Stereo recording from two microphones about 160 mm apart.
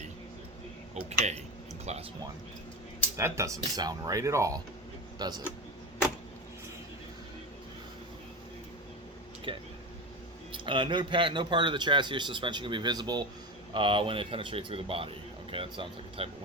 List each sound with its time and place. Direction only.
0.9 s speech: 45° right (ahead or behind)
3.2 s a man's voice: 20° right (ahead or behind)
9.5 s a man's voice: 35° right (ahead or behind)